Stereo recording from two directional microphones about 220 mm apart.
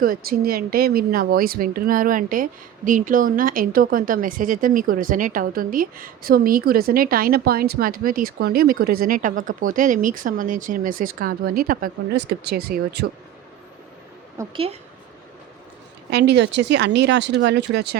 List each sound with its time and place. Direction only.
0.0 s speech: 40° right (ahead or behind)
14.3 s a woman's voice: 25° right (ahead or behind)
16.0 s speech: 50° right (ahead or behind)